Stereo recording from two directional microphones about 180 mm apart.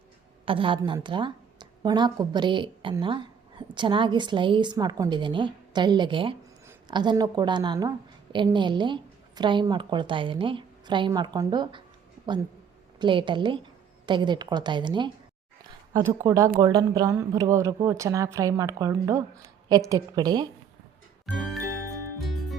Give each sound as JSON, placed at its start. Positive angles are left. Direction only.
{"t": 0.4, "sound": "a woman's voice", "side_deg": -30}
{"t": 13.0, "sound": "a woman's voice", "side_deg": -25}
{"t": 21.2, "sound": "music", "side_deg": 0}